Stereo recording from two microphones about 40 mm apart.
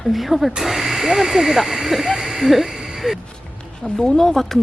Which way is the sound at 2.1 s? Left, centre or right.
Centre.